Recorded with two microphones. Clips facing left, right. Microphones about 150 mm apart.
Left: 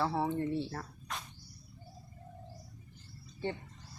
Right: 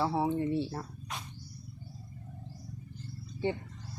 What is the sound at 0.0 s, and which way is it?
Speech, 10° right (ahead or behind).